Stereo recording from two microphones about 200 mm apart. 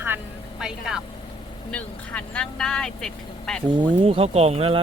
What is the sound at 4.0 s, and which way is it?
Speech, 25° right (ahead or behind).